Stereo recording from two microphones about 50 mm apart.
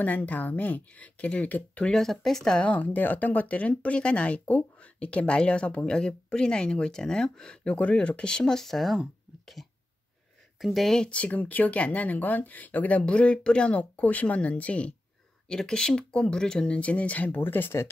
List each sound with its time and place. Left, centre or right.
0.0 s speech: left
1.9 s speech: centre
2.6 s speech: left; by 7.7 s centre
7.7 s speech: left; by 9.0 s centre
9.6 s throat clearing: centre
10.6 s speech: centre
11.1 s speech: left
13.0 s speech: left
15.4 s speech: centre; by 17.4 s left
17.4 s speech: left